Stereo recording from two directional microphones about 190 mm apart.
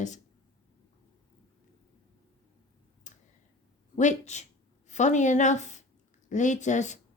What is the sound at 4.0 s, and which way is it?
A woman's voice, 40° left (ahead or behind).